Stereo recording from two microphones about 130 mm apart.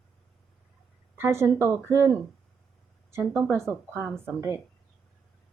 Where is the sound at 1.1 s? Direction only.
20° right (ahead or behind).